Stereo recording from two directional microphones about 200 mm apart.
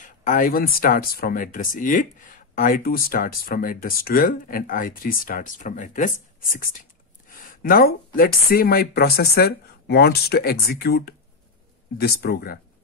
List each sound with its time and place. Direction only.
0.0 s speech: 40° left (ahead or behind)